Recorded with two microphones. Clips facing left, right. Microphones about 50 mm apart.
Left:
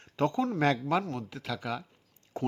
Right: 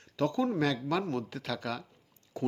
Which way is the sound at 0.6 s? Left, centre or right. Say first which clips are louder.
Left 3 dB; left.